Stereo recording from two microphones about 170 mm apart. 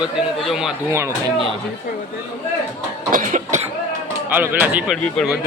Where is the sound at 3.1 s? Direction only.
50° right (ahead or behind).